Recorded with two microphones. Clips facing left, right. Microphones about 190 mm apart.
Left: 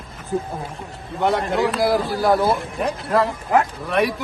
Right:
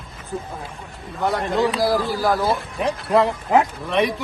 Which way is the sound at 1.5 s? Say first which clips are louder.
Even; centre (ahead or behind).